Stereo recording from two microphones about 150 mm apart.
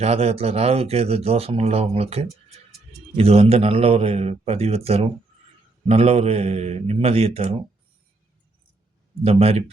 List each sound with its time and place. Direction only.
0.0 s a man's voice: 45° right (ahead or behind)
9.2 s a man's voice: 40° right (ahead or behind)